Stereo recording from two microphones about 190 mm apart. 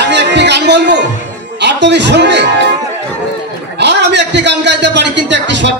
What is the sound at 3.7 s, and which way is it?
A man's voice, 65° right (ahead or behind).